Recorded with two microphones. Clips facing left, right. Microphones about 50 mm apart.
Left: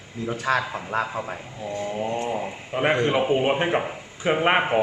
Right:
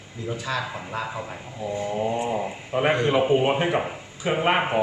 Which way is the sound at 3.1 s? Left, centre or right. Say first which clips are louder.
Right 1 dB; centre.